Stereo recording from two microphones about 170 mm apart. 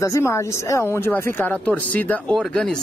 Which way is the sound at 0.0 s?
15° left (ahead or behind).